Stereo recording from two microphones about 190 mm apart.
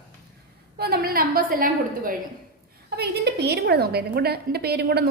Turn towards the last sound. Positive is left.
turn(degrees=-55)  # may be behind; listen again after turning